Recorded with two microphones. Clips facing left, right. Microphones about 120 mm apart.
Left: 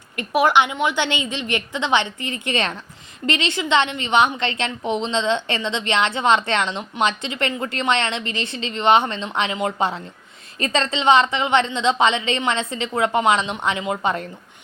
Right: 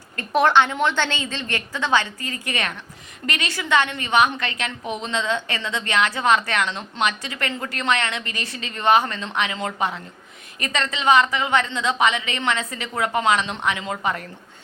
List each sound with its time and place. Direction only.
0.2 s a woman's voice: 10° left (ahead or behind)